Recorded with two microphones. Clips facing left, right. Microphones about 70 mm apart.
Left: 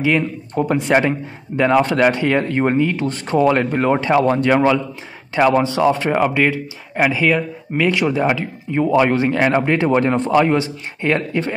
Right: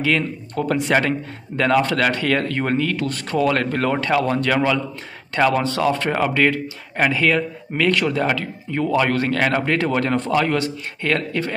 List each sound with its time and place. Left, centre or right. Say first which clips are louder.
0.0 s speech: left 3 dB; centre